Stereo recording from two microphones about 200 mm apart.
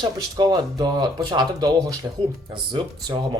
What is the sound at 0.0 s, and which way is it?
Speech, 20° right (ahead or behind).